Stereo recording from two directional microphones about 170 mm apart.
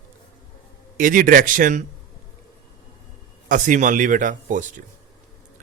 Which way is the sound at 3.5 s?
50° right (ahead or behind).